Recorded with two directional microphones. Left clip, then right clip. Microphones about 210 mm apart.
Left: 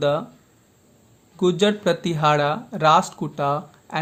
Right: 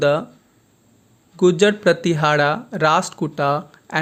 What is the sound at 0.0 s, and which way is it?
Speech, 20° right (ahead or behind).